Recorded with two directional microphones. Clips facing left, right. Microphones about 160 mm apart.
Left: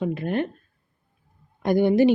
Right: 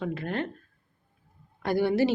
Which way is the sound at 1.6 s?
20° left (ahead or behind).